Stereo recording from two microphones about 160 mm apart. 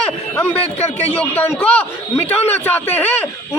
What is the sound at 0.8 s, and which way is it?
Speech, 40° left (ahead or behind).